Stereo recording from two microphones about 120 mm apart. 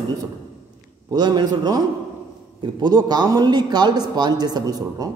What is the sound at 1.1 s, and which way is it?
A man's voice, 35° right (ahead or behind).